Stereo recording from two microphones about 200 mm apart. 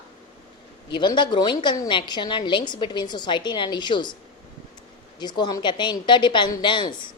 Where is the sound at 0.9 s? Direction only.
25° left (ahead or behind).